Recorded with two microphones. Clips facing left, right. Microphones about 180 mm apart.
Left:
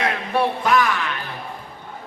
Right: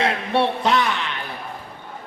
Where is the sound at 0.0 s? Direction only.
30° right (ahead or behind).